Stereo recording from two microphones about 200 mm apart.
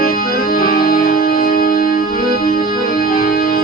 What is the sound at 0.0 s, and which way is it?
Music, 45° left (ahead or behind).